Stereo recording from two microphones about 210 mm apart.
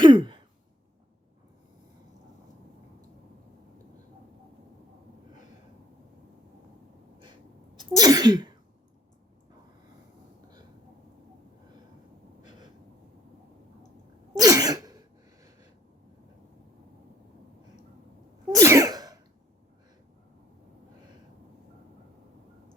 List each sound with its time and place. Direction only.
0.0 s a sound: 20° right (ahead or behind)
7.8 s speech: 20° right (ahead or behind)
14.3 s sneeze: 15° right (ahead or behind)
18.5 s sneeze: 15° right (ahead or behind)